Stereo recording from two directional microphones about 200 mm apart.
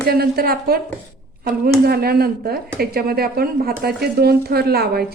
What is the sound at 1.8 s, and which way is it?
Speech, 50° right (ahead or behind).